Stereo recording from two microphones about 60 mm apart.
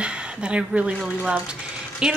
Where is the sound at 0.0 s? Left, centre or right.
Centre.